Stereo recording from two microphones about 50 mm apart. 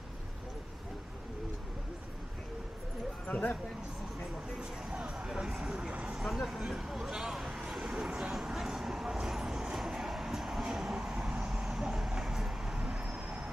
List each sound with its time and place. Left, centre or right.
3.3 s speech: left
4.6 s a sound: centre
5.3 s vehicle: centre
6.2 s a sound: centre
8.4 s vehicle: centre
12.7 s vehicle: centre